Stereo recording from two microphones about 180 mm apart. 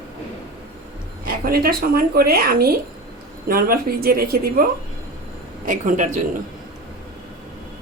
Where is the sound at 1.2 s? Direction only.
55° right (ahead or behind).